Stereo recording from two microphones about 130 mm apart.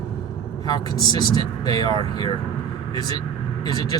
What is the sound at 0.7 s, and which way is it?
Speech, 35° left (ahead or behind).